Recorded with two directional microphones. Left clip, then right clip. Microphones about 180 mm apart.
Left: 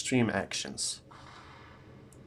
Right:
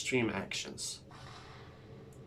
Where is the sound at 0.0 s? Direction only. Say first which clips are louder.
Left 3 dB; 50° left (ahead or behind).